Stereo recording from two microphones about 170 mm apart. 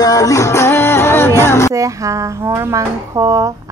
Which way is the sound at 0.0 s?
20° left (ahead or behind).